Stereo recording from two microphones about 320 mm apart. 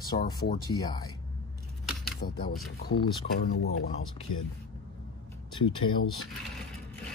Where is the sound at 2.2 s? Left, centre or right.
Left.